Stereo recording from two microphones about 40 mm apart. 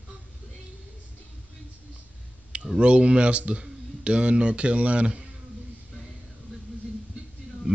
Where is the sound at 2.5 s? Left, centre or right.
Right.